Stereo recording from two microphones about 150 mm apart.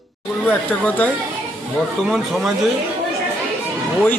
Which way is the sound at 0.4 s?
10° left (ahead or behind).